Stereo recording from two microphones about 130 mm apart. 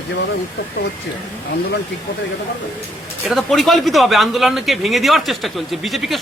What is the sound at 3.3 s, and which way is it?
Speech, centre (ahead or behind).